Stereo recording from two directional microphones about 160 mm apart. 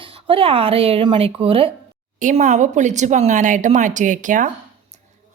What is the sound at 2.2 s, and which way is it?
Speech, 50° right (ahead or behind).